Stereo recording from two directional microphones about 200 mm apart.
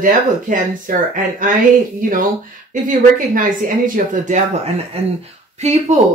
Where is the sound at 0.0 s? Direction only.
40° right (ahead or behind).